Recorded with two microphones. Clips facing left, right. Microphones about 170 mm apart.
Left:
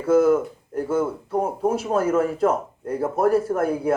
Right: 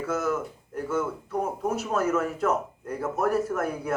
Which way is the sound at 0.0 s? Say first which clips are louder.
Left 10 dB; 30° left (ahead or behind).